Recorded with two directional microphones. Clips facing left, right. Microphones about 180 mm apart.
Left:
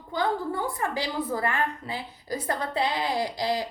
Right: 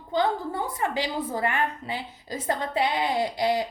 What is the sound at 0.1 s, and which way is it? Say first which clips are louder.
A woman's voice: right 2 dB; 20° right (ahead or behind).